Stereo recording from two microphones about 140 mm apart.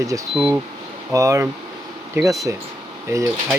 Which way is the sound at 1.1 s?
20° right (ahead or behind).